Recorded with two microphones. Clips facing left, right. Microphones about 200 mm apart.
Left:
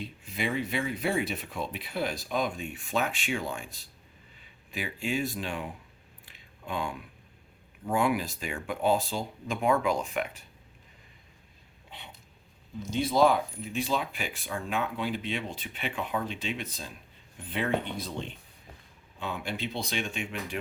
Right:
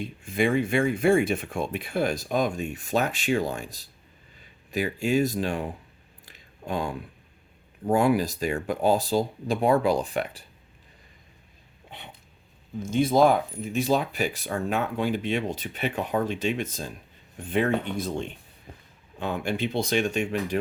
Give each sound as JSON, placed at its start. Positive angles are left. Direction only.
{"t": 0.0, "sound": "speech", "side_deg": -50}
{"t": 6.2, "sound": "a sound", "side_deg": -40}
{"t": 7.9, "sound": "speech", "side_deg": -40}
{"t": 12.8, "sound": "speech", "side_deg": -50}